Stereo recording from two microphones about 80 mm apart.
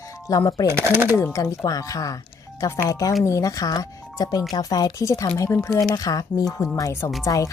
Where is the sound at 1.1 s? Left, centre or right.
Left.